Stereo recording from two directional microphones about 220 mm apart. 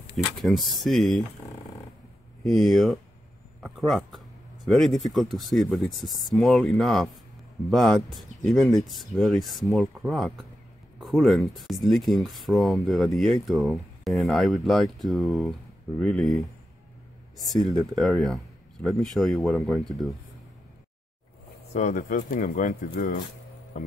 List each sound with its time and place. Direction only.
0.4 s speech: centre (ahead or behind)
2.4 s speech: centre (ahead or behind)
17.4 s speech: centre (ahead or behind)
21.7 s speech: 35° left (ahead or behind)